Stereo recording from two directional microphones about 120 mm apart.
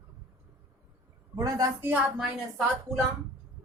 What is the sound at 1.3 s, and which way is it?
Speech, 30° right (ahead or behind).